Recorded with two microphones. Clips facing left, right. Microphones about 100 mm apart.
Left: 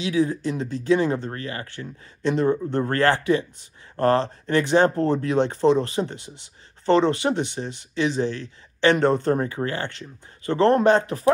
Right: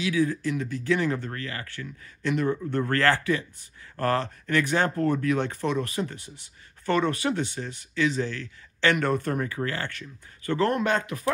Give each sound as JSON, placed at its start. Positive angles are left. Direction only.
{"t": 0.0, "sound": "speech", "side_deg": 25}